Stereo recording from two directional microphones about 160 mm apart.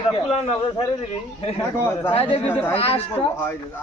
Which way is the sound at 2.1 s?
35° left (ahead or behind).